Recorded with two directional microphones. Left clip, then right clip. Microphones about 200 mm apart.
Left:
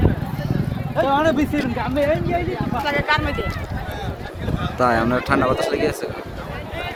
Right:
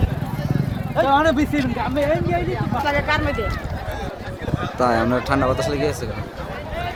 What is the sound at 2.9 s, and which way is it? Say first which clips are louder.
Speech: left 1 dB; 60° right (ahead or behind).